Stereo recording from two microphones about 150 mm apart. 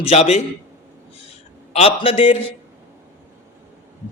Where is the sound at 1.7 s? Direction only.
40° left (ahead or behind).